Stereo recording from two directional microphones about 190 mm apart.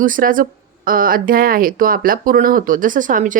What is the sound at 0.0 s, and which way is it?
Speech, 45° right (ahead or behind).